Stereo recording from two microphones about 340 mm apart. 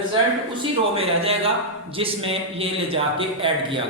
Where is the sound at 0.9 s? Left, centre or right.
Centre.